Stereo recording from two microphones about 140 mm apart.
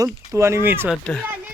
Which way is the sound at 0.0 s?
20° right (ahead or behind).